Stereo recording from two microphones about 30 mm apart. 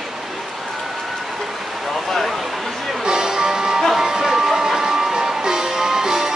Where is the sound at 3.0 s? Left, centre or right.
Right.